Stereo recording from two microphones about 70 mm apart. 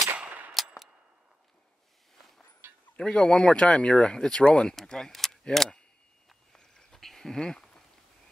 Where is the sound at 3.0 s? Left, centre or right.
Centre.